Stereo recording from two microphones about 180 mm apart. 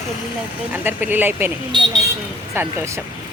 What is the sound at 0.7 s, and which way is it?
Speech, 10° right (ahead or behind).